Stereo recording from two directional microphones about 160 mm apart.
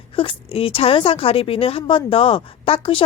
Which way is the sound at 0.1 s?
35° left (ahead or behind).